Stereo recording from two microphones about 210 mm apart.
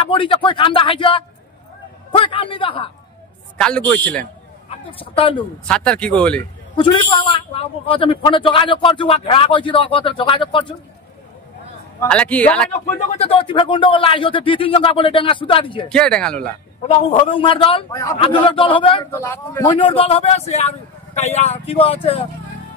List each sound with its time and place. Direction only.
0.0 s a man's voice: 25° left (ahead or behind)
3.5 s a man's voice: 5° left (ahead or behind)
4.6 s speech: 25° left (ahead or behind)
5.7 s speech: 5° left (ahead or behind)
6.8 s a man's voice: 25° left (ahead or behind)
12.0 s a man's voice: 5° left (ahead or behind)
13.2 s a man's voice: 25° left (ahead or behind)
15.9 s speech: 5° left (ahead or behind)
16.8 s a man's voice: 30° left (ahead or behind)
19.1 s a man's voice: 10° left (ahead or behind)
19.9 s a man's voice: 25° left (ahead or behind)